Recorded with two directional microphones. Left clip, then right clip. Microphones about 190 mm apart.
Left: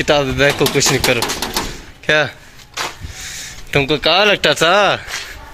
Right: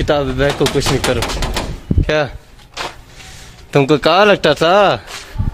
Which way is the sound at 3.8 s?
50° right (ahead or behind).